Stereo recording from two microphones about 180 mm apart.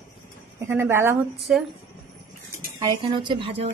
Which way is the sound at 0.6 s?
15° right (ahead or behind).